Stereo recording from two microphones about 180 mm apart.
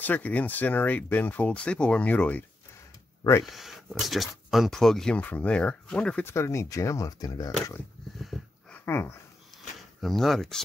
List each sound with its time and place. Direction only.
0.0 s speech: 10° left (ahead or behind)
3.4 s speech: centre (ahead or behind); by 7.5 s 20° left (ahead or behind)
8.2 s dog: centre (ahead or behind)
8.8 s speech: 15° left (ahead or behind)
10.0 s speech: centre (ahead or behind)